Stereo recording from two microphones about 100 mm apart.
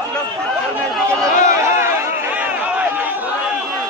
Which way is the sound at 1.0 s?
30° right (ahead or behind).